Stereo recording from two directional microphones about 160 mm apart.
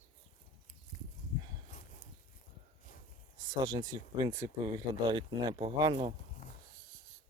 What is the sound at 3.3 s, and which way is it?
Speech, 25° right (ahead or behind).